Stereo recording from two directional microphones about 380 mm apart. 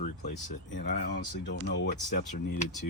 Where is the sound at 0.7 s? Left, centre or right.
Left.